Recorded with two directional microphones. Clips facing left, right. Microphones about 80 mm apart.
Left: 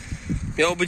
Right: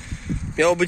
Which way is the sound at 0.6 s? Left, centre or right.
Centre.